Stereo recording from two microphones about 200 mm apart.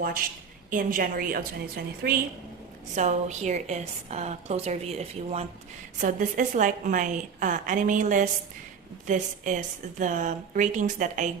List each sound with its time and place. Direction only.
0.7 s a woman's voice: 45° right (ahead or behind)
2.9 s a woman's voice: 35° right (ahead or behind)